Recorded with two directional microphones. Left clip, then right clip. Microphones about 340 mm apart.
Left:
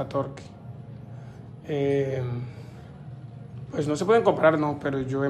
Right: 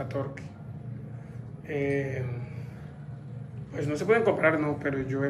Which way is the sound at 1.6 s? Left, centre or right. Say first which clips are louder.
Left 4 dB; centre.